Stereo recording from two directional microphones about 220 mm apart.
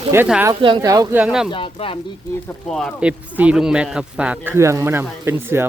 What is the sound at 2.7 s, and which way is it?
A man's voice, centre (ahead or behind).